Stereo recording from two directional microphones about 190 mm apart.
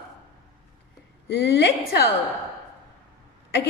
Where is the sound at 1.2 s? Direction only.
65° left (ahead or behind).